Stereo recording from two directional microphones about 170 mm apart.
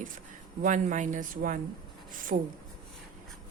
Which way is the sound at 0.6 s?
45° right (ahead or behind).